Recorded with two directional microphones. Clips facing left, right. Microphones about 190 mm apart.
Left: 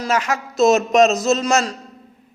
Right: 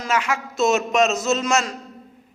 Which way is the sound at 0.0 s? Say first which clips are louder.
Left 2 dB; 40° left (ahead or behind).